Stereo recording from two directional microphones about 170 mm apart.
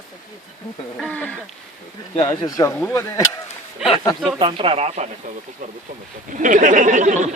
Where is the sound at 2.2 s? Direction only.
20° left (ahead or behind).